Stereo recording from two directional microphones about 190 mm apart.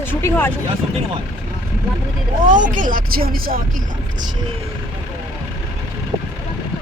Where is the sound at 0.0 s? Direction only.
10° left (ahead or behind).